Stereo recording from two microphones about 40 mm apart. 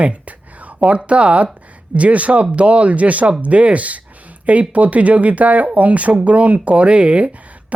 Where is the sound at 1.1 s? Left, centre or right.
Right.